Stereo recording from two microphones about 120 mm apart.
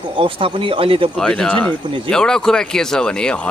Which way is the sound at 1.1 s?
5° left (ahead or behind).